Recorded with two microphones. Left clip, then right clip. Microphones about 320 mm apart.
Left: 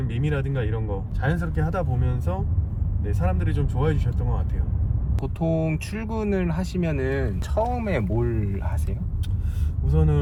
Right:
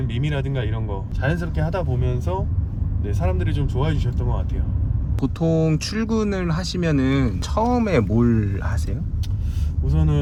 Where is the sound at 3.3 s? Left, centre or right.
Centre.